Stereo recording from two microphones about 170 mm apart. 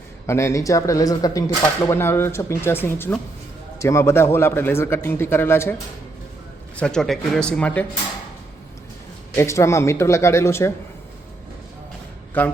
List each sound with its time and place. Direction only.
0.3 s speech: 15° left (ahead or behind)
6.7 s speech: 5° left (ahead or behind)
9.3 s speech: 15° left (ahead or behind)